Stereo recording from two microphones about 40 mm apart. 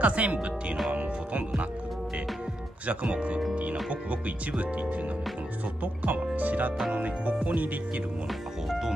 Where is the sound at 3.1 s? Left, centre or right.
Right.